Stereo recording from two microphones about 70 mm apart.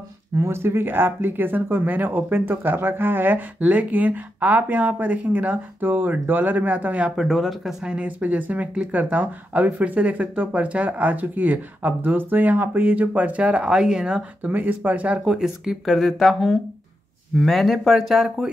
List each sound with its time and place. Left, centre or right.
0.4 s speech: right; by 7.7 s centre
7.8 s speech: centre
14.5 s speech: right
15.2 s speech: centre